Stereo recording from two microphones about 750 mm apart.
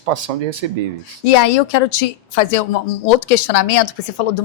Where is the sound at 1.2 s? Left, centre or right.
Left.